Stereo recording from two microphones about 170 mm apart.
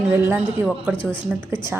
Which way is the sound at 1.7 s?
5° right (ahead or behind).